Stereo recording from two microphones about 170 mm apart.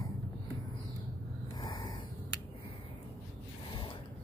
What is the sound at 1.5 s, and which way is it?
Snort, 25° left (ahead or behind).